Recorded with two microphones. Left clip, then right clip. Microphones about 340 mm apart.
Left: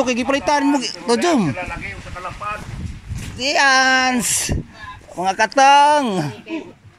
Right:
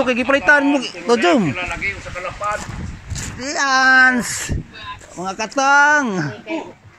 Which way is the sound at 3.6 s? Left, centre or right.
Centre.